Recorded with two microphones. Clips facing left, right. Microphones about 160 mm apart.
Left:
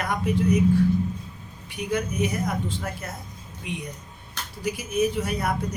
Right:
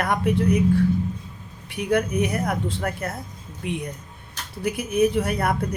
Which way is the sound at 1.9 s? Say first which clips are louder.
Right 4 dB; 60° right (ahead or behind).